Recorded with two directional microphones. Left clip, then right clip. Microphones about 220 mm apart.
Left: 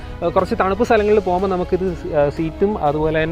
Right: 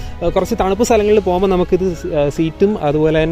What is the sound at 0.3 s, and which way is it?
Speech, 30° right (ahead or behind).